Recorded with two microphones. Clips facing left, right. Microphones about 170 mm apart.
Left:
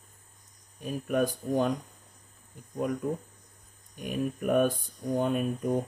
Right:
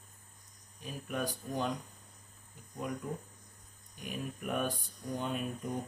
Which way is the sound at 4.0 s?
50° left (ahead or behind).